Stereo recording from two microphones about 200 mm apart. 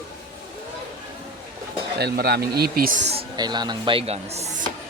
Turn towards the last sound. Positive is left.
turn(degrees=-30)  # may be behind; listen again after turning